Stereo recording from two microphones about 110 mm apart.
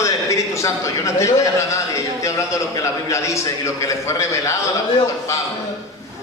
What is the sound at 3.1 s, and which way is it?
A man's voice, 25° left (ahead or behind).